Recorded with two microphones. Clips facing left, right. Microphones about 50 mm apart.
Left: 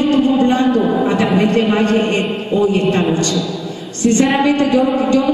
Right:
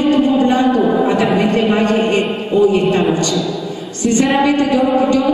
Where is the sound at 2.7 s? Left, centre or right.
Centre.